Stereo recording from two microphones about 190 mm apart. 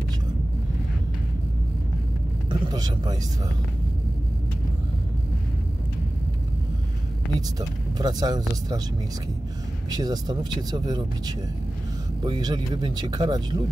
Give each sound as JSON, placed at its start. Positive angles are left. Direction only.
{"t": 2.6, "sound": "speech", "side_deg": -20}
{"t": 7.3, "sound": "speech", "side_deg": -20}
{"t": 9.8, "sound": "speech", "side_deg": -20}